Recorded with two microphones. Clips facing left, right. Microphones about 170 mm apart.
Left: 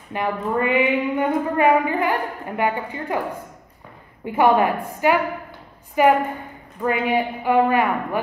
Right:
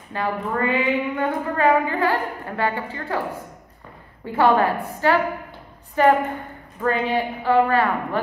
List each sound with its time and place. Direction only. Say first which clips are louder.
0.1 s a woman's voice: left 2 dB; 15° left (ahead or behind)
4.3 s a woman's voice: left 1 dB; 15° left (ahead or behind)